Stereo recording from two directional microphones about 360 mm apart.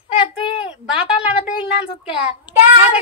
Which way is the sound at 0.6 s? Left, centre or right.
Centre.